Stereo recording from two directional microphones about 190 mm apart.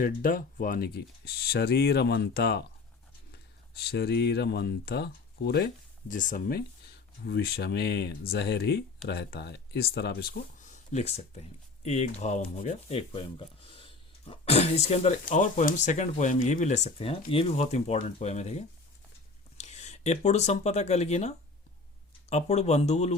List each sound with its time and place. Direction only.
0.0 s speech: 45° left (ahead or behind)
7.3 s speech: 60° left (ahead or behind); by 23.1 s 35° left (ahead or behind)